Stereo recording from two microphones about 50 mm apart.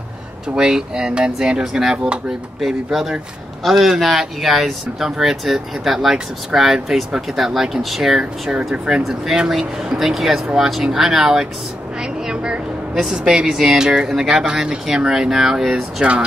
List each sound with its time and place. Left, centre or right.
0.6 s speech: centre